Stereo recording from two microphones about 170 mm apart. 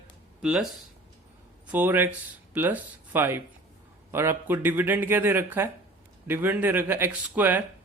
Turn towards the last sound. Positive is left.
turn(degrees=-10)  # may be behind; listen again after turning